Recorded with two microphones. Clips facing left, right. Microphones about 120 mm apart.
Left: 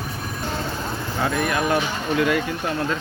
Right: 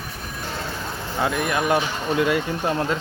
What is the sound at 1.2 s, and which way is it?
Speech, 15° right (ahead or behind).